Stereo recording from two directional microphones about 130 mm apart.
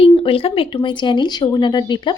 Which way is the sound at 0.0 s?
45° left (ahead or behind).